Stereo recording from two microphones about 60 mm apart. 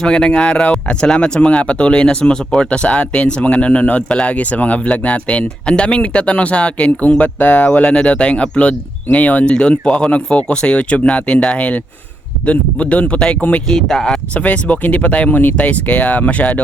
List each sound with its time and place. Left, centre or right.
0.0 s speech: centre
13.7 s speech: centre
14.3 s speech: left